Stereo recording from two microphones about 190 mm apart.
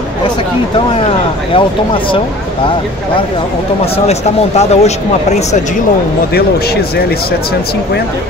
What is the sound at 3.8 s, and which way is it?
Speech, 30° left (ahead or behind).